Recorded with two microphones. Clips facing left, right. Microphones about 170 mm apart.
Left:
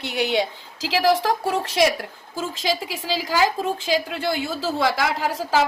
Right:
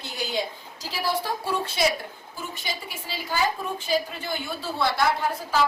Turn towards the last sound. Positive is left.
turn(degrees=90)